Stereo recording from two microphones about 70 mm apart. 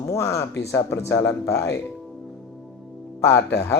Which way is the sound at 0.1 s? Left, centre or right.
Left.